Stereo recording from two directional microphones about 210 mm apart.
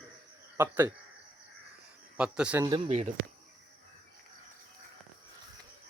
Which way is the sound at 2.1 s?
5° right (ahead or behind).